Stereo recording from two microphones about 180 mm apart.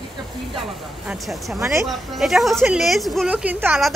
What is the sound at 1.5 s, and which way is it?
Speech, 15° right (ahead or behind).